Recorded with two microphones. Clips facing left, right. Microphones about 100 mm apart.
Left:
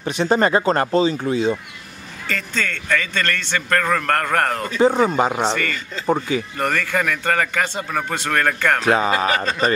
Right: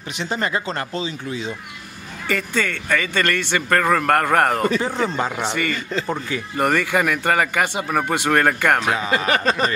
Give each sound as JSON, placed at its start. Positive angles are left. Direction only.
{"t": 0.0, "sound": "speech", "side_deg": 40}
{"t": 2.2, "sound": "a man's voice", "side_deg": -10}
{"t": 4.7, "sound": "speech", "side_deg": 20}
{"t": 5.5, "sound": "a man's voice", "side_deg": -15}
{"t": 6.0, "sound": "speech", "side_deg": 20}
{"t": 6.5, "sound": "a man's voice", "side_deg": -10}
{"t": 8.8, "sound": "speech", "side_deg": 40}